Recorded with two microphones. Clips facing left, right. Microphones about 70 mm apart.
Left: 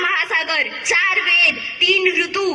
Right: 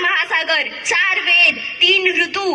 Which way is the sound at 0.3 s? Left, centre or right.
Right.